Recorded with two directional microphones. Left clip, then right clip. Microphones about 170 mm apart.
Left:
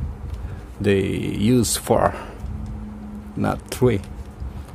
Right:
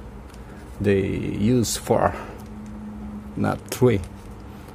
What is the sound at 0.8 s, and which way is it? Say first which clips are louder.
Speech: left 1 dB; 10° left (ahead or behind).